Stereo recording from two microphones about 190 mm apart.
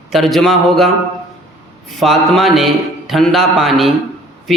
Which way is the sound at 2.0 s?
Centre (ahead or behind).